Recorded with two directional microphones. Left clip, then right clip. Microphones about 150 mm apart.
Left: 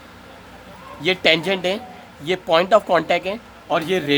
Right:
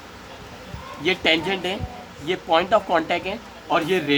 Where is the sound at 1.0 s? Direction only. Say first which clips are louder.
Left 3 dB; 55° left (ahead or behind).